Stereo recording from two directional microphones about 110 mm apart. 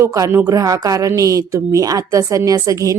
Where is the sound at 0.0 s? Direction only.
30° right (ahead or behind).